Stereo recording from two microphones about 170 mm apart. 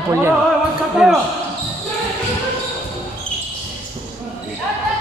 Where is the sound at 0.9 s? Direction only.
5° right (ahead or behind).